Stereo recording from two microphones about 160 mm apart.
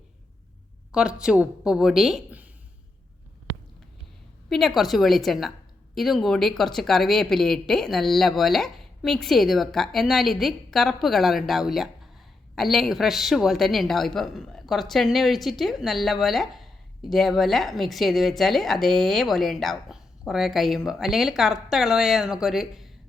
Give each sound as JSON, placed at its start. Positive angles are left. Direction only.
{"t": 0.9, "sound": "a woman's voice", "side_deg": -5}
{"t": 4.4, "sound": "a woman's voice", "side_deg": 0}